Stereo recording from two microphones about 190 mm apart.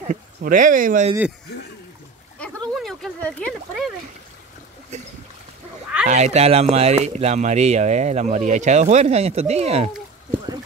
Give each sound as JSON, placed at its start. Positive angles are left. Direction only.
{"t": 0.1, "sound": "speech", "side_deg": -45}
{"t": 2.7, "sound": "a sound", "side_deg": 0}
{"t": 6.0, "sound": "speech", "side_deg": -35}